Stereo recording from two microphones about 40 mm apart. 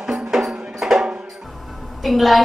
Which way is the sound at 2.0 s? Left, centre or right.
Centre.